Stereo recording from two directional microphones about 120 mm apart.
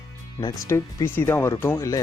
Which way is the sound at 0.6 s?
20° left (ahead or behind).